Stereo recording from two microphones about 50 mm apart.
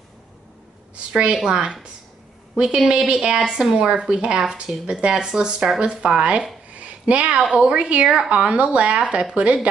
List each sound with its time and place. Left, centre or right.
1.1 s a woman's voice: centre
6.7 s a sound: right
7.5 s speech: right